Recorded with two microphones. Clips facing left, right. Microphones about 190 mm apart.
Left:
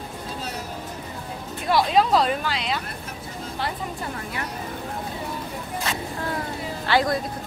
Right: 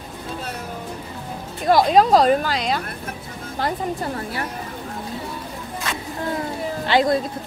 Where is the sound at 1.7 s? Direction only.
45° right (ahead or behind).